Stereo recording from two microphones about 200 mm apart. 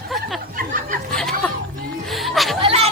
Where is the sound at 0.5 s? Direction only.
45° right (ahead or behind).